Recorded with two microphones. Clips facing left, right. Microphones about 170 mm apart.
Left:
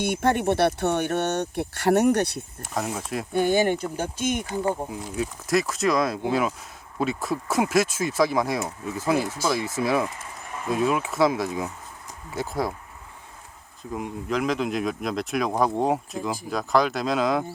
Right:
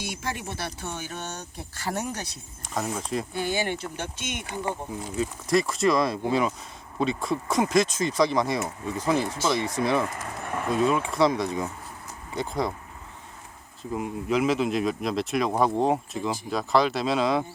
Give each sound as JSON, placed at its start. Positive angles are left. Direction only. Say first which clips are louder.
{"t": 0.0, "sound": "speech", "louder": "left 11 dB", "side_deg": 60}
{"t": 2.6, "sound": "speech", "louder": "even", "side_deg": 5}
{"t": 3.3, "sound": "speech", "louder": "left 10 dB", "side_deg": 50}
{"t": 4.9, "sound": "speech", "louder": "even", "side_deg": 10}
{"t": 10.4, "sound": "a sound", "louder": "right 6 dB", "side_deg": -60}
{"t": 10.8, "sound": "speech", "louder": "left 1 dB", "side_deg": 5}
{"t": 13.9, "sound": "speech", "louder": "right 2 dB", "side_deg": -5}